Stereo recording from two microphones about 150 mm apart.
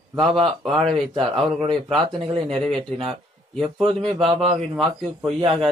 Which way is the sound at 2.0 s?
35° right (ahead or behind).